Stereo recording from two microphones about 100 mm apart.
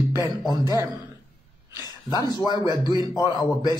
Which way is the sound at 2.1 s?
40° left (ahead or behind).